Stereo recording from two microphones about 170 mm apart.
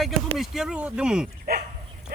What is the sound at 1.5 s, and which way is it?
Speech, 60° right (ahead or behind).